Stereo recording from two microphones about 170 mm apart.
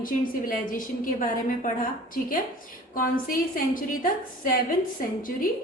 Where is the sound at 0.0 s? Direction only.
55° left (ahead or behind).